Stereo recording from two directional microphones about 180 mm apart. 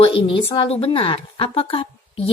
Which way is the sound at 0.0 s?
30° left (ahead or behind).